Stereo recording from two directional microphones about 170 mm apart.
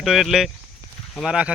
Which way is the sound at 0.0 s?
Centre (ahead or behind).